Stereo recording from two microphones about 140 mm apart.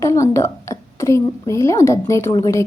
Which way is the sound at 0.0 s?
20° left (ahead or behind).